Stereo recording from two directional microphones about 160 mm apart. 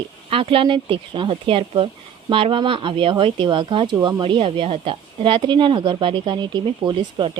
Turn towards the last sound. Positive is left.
turn(degrees=-30)  # may be behind; listen again after turning